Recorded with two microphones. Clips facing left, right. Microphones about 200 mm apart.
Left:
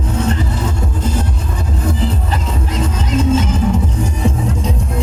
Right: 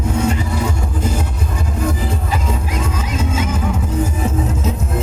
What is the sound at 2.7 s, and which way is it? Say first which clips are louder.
Music: left 4 dB; 10° right (ahead or behind).